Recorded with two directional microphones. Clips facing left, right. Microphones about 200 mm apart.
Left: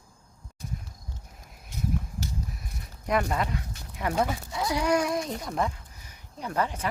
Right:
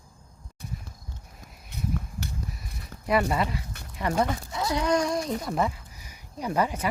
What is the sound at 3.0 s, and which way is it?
Speech, 5° right (ahead or behind).